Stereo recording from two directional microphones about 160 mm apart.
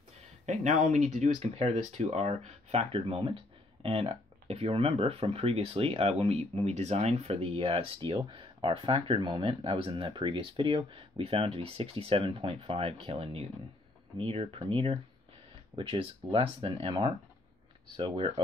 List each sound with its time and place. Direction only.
0.5 s speech: 50° right (ahead or behind)
17.9 s speech: 30° right (ahead or behind)